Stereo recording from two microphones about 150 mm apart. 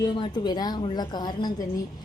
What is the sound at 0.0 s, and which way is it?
A woman's voice, 30° left (ahead or behind).